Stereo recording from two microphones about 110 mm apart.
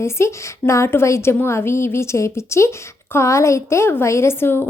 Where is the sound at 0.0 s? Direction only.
25° left (ahead or behind).